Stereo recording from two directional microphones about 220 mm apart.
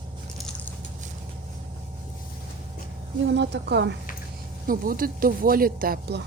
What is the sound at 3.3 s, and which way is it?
Speech, 50° right (ahead or behind).